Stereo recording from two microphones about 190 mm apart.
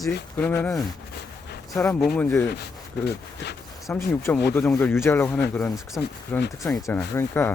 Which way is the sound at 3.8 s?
10° left (ahead or behind).